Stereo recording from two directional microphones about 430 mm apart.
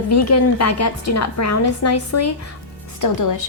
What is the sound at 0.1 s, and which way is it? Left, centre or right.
A woman's voice, left.